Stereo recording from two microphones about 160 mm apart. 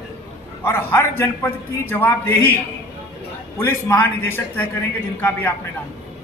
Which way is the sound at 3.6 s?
15° left (ahead or behind).